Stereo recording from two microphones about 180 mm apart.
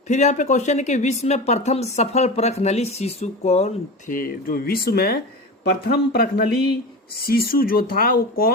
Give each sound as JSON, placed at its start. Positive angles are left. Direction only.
{"t": 0.1, "sound": "speech", "side_deg": 40}